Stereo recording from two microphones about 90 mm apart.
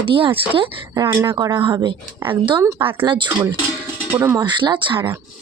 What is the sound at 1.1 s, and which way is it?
Speech, 25° right (ahead or behind).